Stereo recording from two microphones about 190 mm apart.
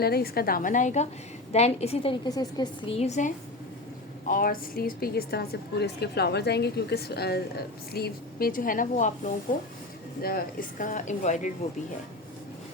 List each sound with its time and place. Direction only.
0.0 s a woman's voice: 55° left (ahead or behind); by 2.9 s 20° left (ahead or behind)
3.0 s a woman's voice: 40° left (ahead or behind)